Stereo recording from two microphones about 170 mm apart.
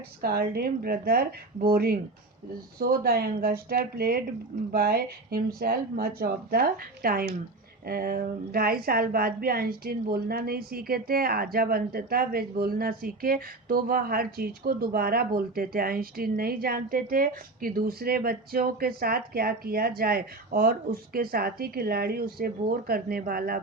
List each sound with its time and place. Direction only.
0.2 s a woman's voice: 65° right (ahead or behind)